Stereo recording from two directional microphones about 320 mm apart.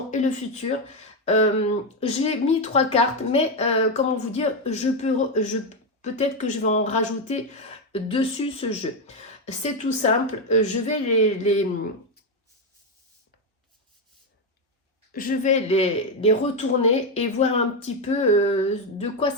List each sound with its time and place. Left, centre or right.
0.1 s speech: left
1.2 s a sound: centre
2.0 s speech: centre
15.1 s speech: left